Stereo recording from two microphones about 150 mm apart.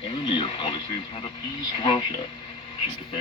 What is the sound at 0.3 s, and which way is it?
Radio, 35° left (ahead or behind).